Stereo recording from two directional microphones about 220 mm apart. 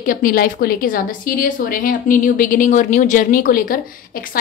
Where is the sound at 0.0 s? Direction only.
40° left (ahead or behind).